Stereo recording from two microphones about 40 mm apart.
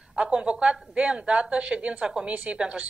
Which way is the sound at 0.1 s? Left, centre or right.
Right.